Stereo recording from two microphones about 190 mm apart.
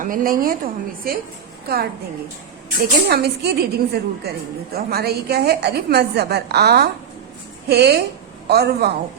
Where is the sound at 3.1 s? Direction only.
55° right (ahead or behind).